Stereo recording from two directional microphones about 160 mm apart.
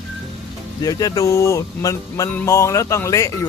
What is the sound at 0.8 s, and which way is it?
Speech, 20° left (ahead or behind).